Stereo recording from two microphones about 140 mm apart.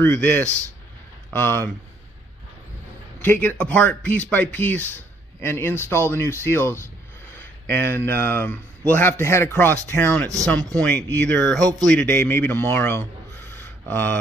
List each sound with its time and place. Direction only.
0.0 s a man's voice: 15° left (ahead or behind)
3.2 s a man's voice: 15° left (ahead or behind)
12.1 s a man's voice: 15° left (ahead or behind)
13.5 s a sound: 15° left (ahead or behind)